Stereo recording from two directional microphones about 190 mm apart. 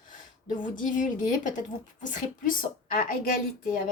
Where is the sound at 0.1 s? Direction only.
45° left (ahead or behind).